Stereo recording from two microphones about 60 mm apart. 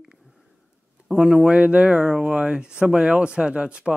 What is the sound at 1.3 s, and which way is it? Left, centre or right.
Speech, centre.